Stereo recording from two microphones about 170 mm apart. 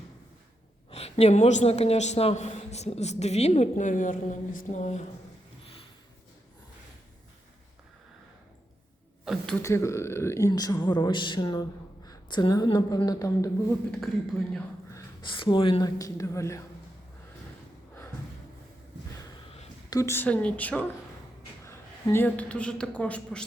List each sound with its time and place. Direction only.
0.9 s speech: 35° left (ahead or behind)
9.2 s speech: centre (ahead or behind)
9.6 s speech: 15° left (ahead or behind)
15.2 s speech: 30° left (ahead or behind)
19.4 s a sound: 30° left (ahead or behind)
20.0 s a woman's voice: 15° left (ahead or behind)